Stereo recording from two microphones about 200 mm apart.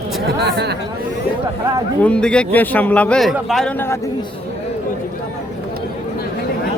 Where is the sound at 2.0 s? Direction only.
5° left (ahead or behind).